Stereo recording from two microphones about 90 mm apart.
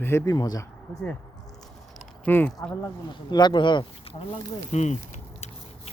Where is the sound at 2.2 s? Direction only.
20° left (ahead or behind).